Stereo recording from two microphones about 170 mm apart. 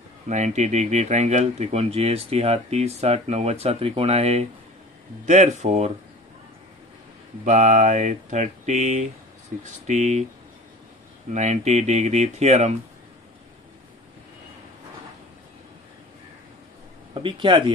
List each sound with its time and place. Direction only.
0.3 s speech: 40° right (ahead or behind)
7.4 s speech: 45° right (ahead or behind)
11.3 s speech: 45° right (ahead or behind)
17.1 s speech: 30° right (ahead or behind)